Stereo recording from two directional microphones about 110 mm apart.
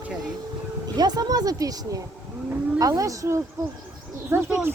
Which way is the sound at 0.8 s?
40° right (ahead or behind).